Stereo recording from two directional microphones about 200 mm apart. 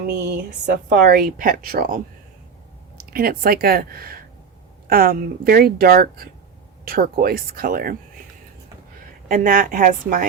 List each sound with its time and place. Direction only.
0.1 s speech: 55° right (ahead or behind)
3.1 s speech: 45° right (ahead or behind)
9.3 s speech: 45° right (ahead or behind)